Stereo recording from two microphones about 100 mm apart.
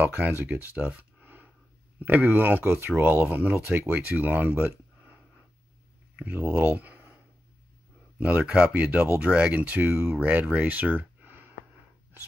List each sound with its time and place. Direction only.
0.0 s speech: 20° right (ahead or behind)
6.7 s a sound: 15° right (ahead or behind)
8.2 s speech: 15° right (ahead or behind)